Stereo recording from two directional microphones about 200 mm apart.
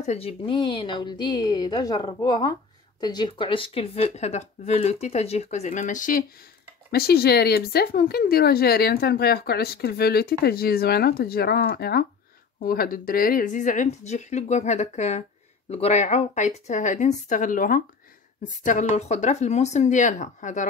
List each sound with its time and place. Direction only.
0.0 s speech: 30° left (ahead or behind)
6.9 s speech: 50° left (ahead or behind)